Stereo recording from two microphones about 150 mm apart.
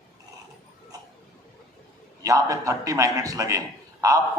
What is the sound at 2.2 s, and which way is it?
A man's voice, 20° right (ahead or behind).